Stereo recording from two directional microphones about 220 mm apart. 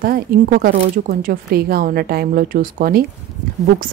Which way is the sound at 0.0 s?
40° right (ahead or behind).